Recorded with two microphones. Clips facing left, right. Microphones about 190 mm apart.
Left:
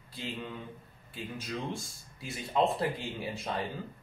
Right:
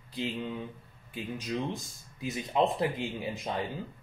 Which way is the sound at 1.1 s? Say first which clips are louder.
Right 4 dB; 20° right (ahead or behind).